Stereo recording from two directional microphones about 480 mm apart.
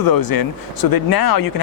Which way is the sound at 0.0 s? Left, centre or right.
Left.